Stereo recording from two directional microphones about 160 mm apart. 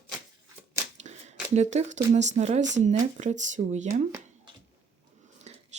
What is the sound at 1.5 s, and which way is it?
Speech, 45° right (ahead or behind).